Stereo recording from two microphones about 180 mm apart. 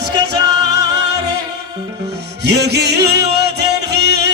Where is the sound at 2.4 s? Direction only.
70° right (ahead or behind).